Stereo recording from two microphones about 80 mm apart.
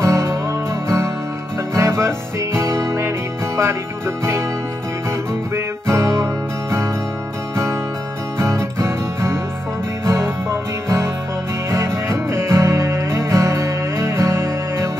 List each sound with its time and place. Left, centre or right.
0.0 s music: right
4.2 s music: right
5.9 s music: right
8.4 s music: right